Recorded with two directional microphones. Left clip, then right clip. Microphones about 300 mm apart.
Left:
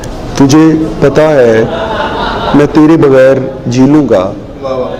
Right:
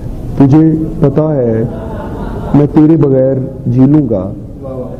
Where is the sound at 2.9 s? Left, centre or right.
Centre.